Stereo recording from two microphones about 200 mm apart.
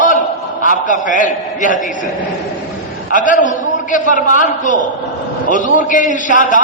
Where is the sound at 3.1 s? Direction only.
40° left (ahead or behind).